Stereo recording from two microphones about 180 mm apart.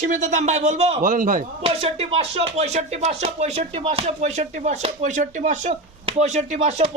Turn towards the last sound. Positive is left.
turn(degrees=-35)  # may be behind; listen again after turning